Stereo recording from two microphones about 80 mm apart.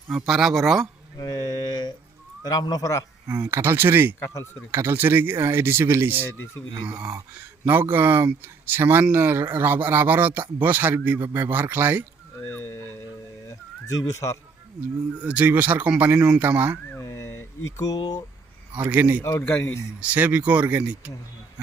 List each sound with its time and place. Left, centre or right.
0.1 s speech: centre
1.2 s a sound: left
2.4 s speech: left
3.2 s speech: right
7.7 s speech: right
12.5 s speech: left
13.5 s a sound: left
15.2 s speech: centre
17.0 s a sound: left
17.7 s speech: left
18.8 s speech: right
19.2 s speech: left
20.0 s speech: centre